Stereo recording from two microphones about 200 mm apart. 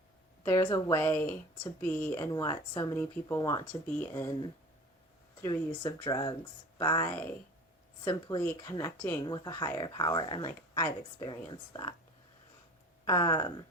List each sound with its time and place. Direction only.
0.4 s speech: 20° left (ahead or behind)
4.1 s speech: 20° left (ahead or behind)
8.4 s speech: 10° left (ahead or behind)
13.1 s speech: 20° left (ahead or behind)